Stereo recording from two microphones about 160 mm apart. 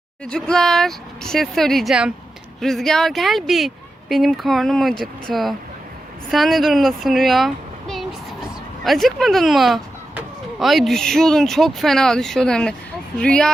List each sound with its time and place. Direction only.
0.3 s a child's voice: 5° left (ahead or behind)